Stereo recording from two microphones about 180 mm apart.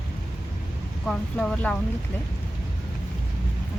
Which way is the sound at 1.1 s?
5° left (ahead or behind).